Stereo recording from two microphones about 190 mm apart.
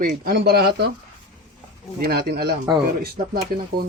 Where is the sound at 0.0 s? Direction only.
50° right (ahead or behind).